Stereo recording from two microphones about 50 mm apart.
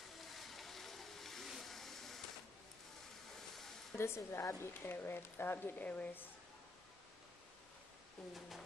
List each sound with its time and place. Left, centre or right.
0.2 s a sound: centre
4.0 s speech: left
4.9 s speech: left
8.3 s speech: centre